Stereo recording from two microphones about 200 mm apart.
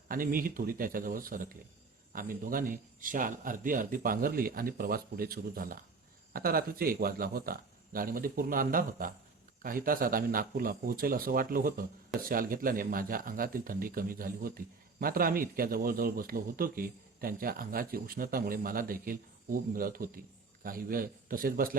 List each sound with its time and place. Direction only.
0.1 s speech: 45° right (ahead or behind)